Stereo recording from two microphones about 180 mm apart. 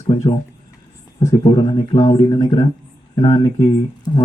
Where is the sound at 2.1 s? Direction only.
20° left (ahead or behind).